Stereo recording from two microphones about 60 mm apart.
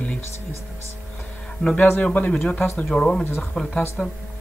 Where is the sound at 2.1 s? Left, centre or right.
Left.